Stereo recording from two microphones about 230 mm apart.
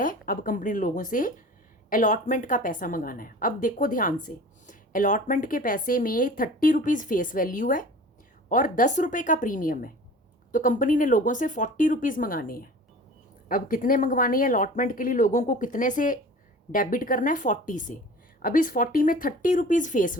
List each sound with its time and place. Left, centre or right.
0.0 s a woman's voice: left